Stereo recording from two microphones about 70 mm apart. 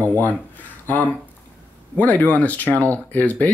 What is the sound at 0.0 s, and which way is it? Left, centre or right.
Speech, left.